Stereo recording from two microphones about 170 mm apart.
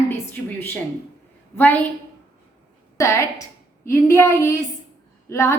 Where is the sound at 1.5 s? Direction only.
10° left (ahead or behind).